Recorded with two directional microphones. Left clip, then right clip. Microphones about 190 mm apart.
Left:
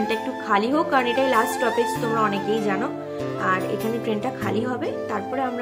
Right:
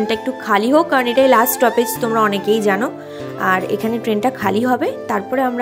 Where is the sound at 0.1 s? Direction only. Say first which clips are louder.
Right 5 dB; 40° right (ahead or behind).